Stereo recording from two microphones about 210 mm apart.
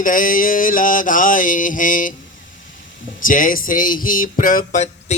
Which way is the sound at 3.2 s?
40° left (ahead or behind).